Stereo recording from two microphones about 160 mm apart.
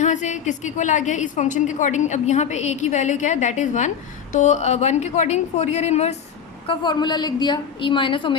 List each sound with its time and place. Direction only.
0.0 s a woman's voice: 50° left (ahead or behind)
6.7 s a woman's voice: 30° left (ahead or behind)